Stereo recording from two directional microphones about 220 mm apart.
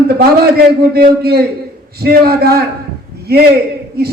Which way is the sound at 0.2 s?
45° right (ahead or behind).